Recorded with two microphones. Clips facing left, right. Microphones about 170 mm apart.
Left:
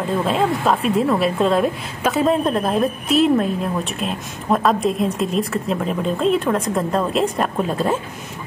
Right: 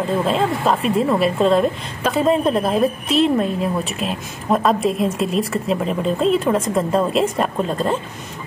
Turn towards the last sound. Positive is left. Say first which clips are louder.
# even
turn(degrees=5)  # may be behind; listen again after turning